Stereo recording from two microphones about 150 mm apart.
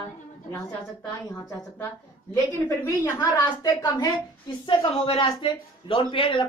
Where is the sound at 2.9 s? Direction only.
20° left (ahead or behind).